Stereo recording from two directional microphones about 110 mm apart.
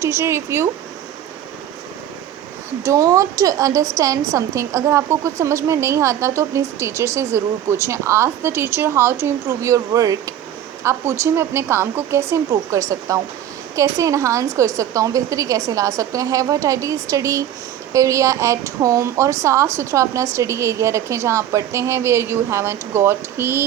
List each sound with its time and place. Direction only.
0.0 s a woman's voice: 25° right (ahead or behind)
2.8 s a woman's voice: 30° right (ahead or behind)